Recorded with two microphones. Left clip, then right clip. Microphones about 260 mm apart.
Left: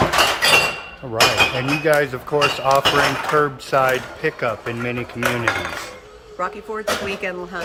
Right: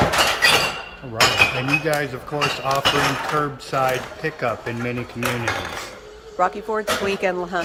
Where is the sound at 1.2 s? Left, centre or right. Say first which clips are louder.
Left 1 dB; left.